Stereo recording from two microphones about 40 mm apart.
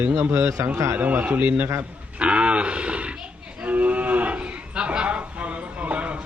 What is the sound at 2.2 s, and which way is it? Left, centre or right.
Speech, right.